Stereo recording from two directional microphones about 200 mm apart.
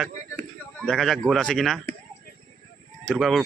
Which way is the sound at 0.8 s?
Centre (ahead or behind).